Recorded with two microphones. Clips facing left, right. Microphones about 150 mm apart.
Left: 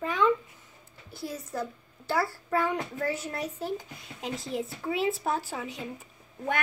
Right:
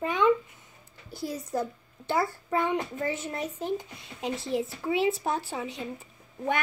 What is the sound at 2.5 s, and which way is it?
Speech, 5° left (ahead or behind).